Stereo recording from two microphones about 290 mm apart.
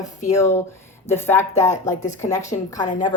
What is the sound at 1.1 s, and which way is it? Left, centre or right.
Speech, centre.